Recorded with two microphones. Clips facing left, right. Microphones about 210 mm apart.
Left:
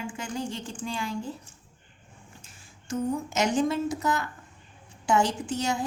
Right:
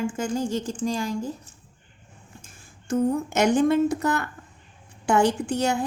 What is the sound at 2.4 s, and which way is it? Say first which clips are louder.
A woman's voice: right 6 dB; 50° right (ahead or behind).